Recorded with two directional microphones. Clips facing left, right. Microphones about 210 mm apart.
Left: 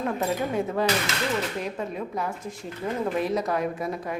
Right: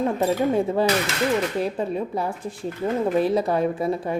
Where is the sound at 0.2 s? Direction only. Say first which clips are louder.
Right 5 dB; 30° right (ahead or behind).